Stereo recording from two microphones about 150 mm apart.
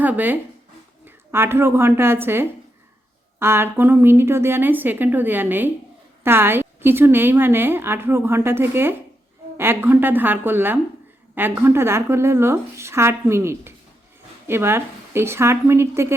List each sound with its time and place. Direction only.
0.0 s a woman's voice: 10° right (ahead or behind)